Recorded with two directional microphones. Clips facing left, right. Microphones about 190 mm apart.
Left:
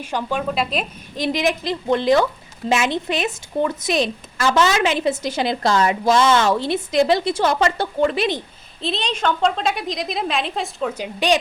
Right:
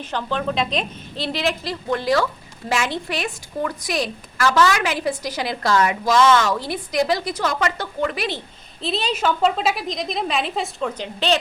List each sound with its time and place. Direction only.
0.0 s a woman's voice: 10° left (ahead or behind)
8.8 s a woman's voice: 5° right (ahead or behind)